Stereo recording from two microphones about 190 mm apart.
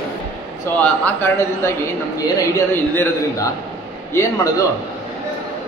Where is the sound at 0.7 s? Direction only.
10° left (ahead or behind).